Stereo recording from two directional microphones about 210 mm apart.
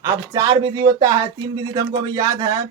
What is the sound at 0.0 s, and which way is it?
A man's voice, 15° right (ahead or behind).